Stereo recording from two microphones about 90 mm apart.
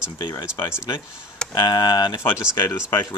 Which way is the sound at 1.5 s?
50° left (ahead or behind).